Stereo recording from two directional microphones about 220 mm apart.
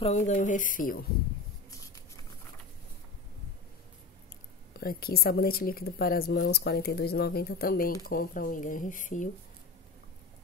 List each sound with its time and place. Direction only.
0.0 s speech: 30° left (ahead or behind)
4.7 s speech: 45° left (ahead or behind)